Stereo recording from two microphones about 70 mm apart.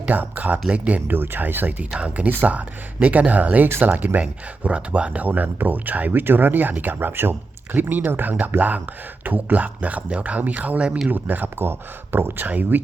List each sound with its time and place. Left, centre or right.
0.0 s speech: right
11.1 s speech: right